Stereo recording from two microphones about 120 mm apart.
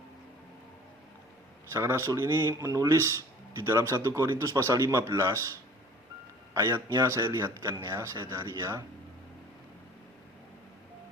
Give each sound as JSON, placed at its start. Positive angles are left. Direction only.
{"t": 1.7, "sound": "speech", "side_deg": -25}
{"t": 6.5, "sound": "speech", "side_deg": -25}